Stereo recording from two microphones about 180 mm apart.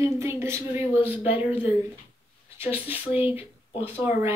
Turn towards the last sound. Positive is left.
turn(degrees=-10)  # may be behind; listen again after turning